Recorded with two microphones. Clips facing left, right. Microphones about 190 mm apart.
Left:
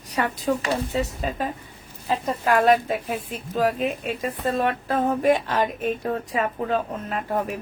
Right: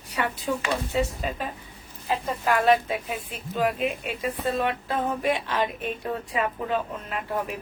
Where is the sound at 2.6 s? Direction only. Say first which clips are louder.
Left 2 dB; 45° left (ahead or behind).